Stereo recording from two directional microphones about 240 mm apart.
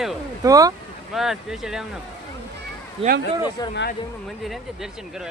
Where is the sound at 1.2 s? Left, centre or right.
Centre.